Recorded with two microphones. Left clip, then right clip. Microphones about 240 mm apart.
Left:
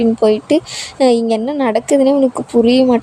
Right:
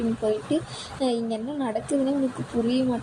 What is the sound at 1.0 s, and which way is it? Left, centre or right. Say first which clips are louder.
A woman's voice: left 14 dB; left.